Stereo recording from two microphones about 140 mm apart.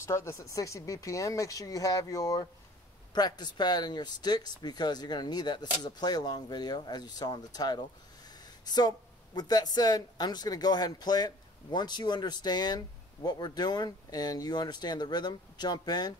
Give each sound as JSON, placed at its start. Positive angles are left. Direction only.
{"t": 0.0, "sound": "speech", "side_deg": 20}